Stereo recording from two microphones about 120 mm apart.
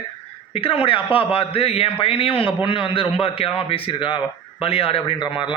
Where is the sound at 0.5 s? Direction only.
50° left (ahead or behind).